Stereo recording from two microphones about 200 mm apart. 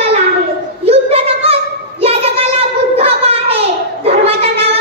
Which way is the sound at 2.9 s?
30° right (ahead or behind).